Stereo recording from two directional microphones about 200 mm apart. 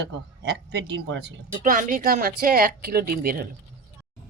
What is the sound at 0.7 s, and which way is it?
Speech, 60° right (ahead or behind).